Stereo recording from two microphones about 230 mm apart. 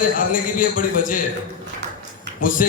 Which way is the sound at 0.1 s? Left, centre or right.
Left.